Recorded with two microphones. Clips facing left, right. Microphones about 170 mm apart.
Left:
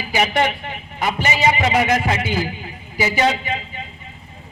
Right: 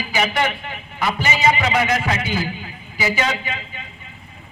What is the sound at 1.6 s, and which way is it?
Speech, 35° left (ahead or behind).